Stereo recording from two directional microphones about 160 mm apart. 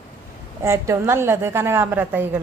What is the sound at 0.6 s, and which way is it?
A woman's voice, 20° right (ahead or behind).